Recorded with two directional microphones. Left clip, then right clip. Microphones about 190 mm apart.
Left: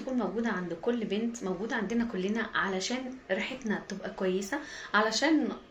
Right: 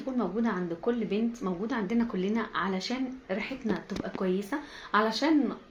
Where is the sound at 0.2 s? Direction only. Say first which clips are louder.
Right 3 dB; 40° right (ahead or behind).